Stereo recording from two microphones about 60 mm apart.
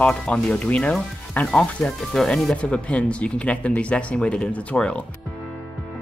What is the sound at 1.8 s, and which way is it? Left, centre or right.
Speech, centre.